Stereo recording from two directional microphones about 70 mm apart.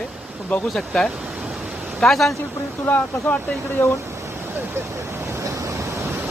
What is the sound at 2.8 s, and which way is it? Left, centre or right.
Speech, left.